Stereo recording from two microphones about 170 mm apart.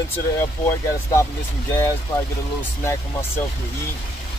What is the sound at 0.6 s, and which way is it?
Speech, 15° left (ahead or behind).